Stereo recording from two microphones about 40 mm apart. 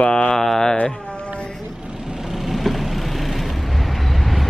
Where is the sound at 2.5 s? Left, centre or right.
Centre.